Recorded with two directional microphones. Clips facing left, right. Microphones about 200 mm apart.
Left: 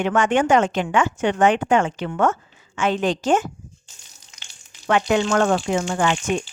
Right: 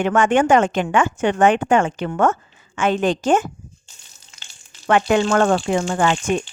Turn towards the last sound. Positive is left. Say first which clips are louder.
# right 2 dB
turn(degrees=-50)  # may be behind; listen again after turning